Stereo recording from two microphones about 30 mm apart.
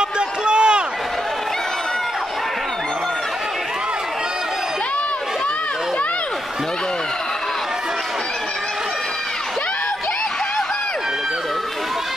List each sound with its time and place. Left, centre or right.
0.5 s run: right